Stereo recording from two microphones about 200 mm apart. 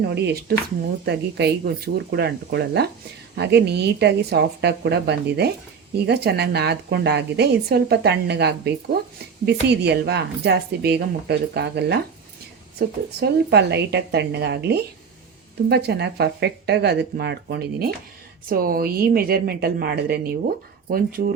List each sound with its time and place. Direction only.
0.0 s speech: 55° right (ahead or behind)
13.1 s a woman's voice: 55° right (ahead or behind)